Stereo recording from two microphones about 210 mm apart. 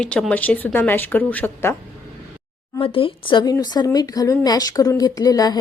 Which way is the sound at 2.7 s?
25° left (ahead or behind).